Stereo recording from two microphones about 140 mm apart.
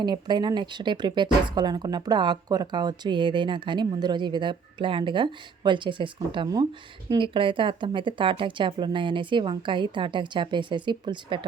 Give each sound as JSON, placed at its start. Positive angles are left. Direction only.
{"t": 0.0, "sound": "speech", "side_deg": -30}